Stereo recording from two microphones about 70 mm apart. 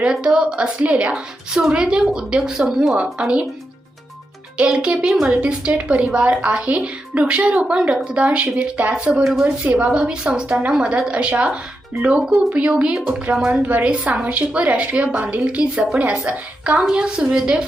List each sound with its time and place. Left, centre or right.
0.0 s a woman's voice: centre
4.5 s a woman's voice: centre
12.5 s a woman's voice: centre